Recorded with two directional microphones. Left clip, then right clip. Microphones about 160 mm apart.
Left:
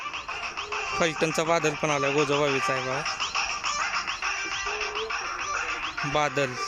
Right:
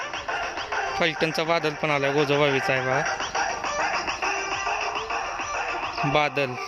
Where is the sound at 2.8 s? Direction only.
50° right (ahead or behind).